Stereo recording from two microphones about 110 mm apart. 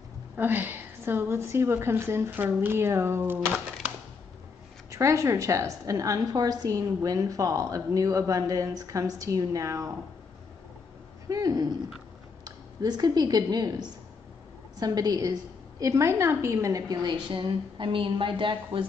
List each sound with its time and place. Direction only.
0.4 s a woman's voice: 20° right (ahead or behind)
4.9 s a woman's voice: 30° right (ahead or behind)
11.2 s a woman's voice: 35° right (ahead or behind); by 18.9 s 55° right (ahead or behind)